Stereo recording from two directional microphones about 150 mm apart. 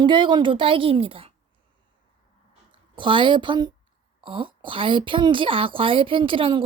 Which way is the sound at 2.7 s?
35° right (ahead or behind).